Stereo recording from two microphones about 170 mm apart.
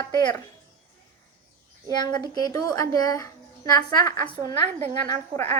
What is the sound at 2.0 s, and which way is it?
A woman's voice, 25° left (ahead or behind).